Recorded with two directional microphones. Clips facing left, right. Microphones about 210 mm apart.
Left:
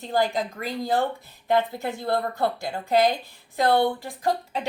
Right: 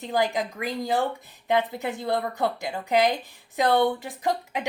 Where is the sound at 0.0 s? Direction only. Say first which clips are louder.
Left 1 dB; 15° right (ahead or behind).